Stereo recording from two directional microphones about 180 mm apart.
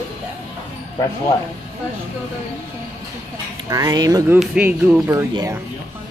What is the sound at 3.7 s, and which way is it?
Speech, 20° right (ahead or behind).